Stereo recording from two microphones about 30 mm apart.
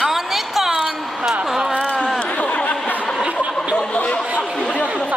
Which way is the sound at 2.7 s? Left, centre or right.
Left.